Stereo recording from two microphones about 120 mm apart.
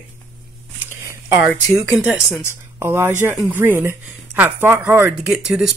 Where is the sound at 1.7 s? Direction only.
25° right (ahead or behind).